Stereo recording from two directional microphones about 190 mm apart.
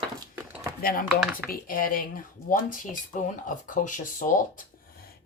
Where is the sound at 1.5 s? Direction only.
45° left (ahead or behind).